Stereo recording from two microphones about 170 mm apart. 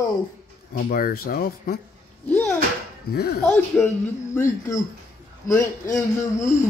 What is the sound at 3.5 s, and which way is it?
Wail, 15° left (ahead or behind).